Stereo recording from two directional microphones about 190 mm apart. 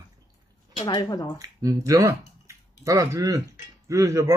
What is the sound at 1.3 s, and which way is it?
Speech, 20° right (ahead or behind).